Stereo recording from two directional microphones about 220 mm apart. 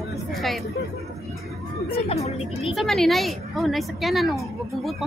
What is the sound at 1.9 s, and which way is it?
Speech, 25° left (ahead or behind).